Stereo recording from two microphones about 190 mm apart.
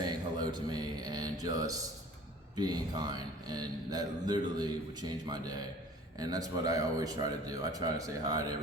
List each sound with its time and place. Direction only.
0.0 s mantra: 20° right (ahead or behind)
2.6 s speech: 20° right (ahead or behind)